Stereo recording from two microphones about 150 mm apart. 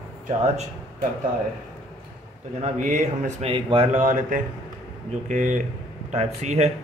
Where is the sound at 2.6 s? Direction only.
55° right (ahead or behind).